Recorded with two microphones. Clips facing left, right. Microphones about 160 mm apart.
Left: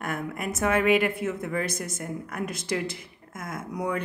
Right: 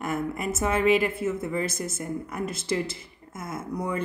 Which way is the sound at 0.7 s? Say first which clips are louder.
Even; 55° left (ahead or behind).